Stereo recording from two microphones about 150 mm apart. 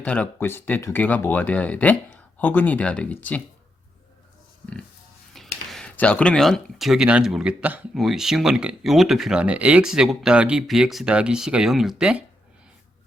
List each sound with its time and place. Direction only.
0.0 s speech: 10° left (ahead or behind)
5.3 s speech: centre (ahead or behind)